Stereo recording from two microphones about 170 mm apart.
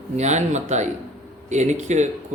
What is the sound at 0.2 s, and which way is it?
A man's voice, 45° right (ahead or behind).